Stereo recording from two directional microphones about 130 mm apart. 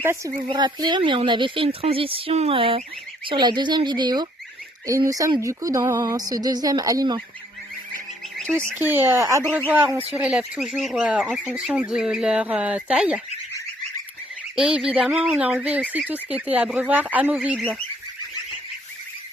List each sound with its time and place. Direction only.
0.0 s a woman's voice: 20° right (ahead or behind)
0.5 s a woman's voice: 35° right (ahead or behind)
8.7 s speech: 15° right (ahead or behind)
14.5 s speech: 5° right (ahead or behind)